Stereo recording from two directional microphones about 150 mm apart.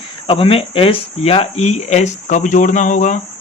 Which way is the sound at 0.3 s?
40° left (ahead or behind).